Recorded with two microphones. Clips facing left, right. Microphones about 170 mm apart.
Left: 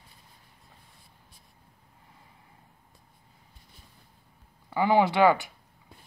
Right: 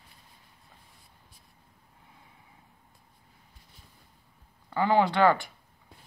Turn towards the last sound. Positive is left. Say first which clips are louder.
# left 1 dB
turn(degrees=5)  # may be behind; listen again after turning